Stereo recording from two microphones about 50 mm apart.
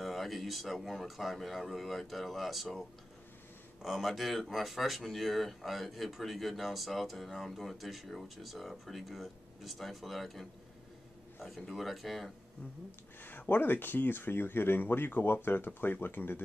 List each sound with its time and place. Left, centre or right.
0.0 s speech: centre
3.8 s speech: centre
13.2 s speech: left